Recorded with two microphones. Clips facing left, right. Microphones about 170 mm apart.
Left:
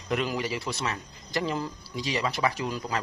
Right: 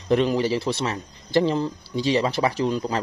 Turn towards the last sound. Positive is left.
turn(degrees=-30)  # may be behind; listen again after turning